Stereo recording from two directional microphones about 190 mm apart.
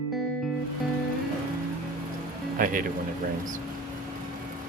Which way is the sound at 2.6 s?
45° right (ahead or behind).